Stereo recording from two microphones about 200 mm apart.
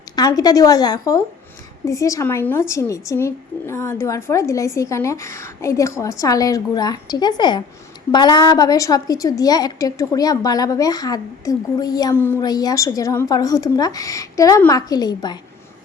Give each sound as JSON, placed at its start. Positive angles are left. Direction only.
{"t": 0.2, "sound": "a woman's voice", "side_deg": 20}